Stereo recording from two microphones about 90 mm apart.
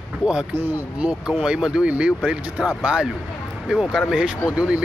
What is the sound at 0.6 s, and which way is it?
Speech, 20° right (ahead or behind).